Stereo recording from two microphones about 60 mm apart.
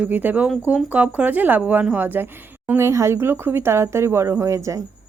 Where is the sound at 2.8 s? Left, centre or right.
Right.